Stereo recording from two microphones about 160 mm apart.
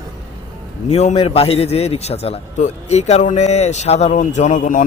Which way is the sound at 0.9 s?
40° left (ahead or behind).